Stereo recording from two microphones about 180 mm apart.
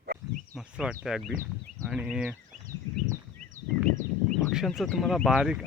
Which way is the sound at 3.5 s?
45° right (ahead or behind).